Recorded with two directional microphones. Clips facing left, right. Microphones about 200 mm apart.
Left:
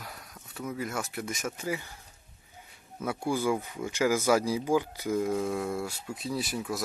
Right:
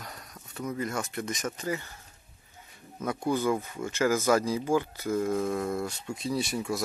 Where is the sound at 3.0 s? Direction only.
10° left (ahead or behind).